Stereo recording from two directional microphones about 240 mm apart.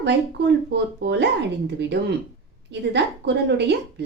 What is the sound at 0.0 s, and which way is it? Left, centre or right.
A woman's voice, right.